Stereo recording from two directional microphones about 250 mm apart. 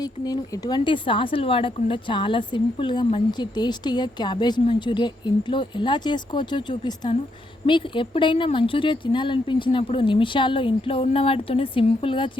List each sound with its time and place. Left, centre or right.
0.0 s speech: centre